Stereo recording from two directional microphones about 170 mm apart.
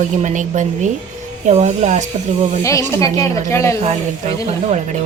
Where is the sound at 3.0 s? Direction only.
15° left (ahead or behind).